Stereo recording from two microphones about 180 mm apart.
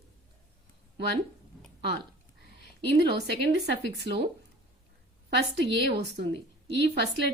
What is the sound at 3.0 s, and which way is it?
Speech, 65° right (ahead or behind).